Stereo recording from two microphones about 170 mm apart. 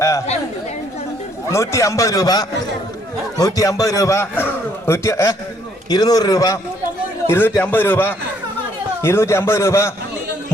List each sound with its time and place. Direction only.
1.5 s a man's voice: 15° left (ahead or behind)